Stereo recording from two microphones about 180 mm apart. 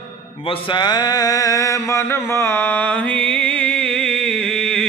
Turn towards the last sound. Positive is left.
turn(degrees=5)  # may be behind; listen again after turning